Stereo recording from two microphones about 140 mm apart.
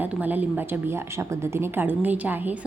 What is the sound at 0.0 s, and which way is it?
A woman's voice, 10° right (ahead or behind).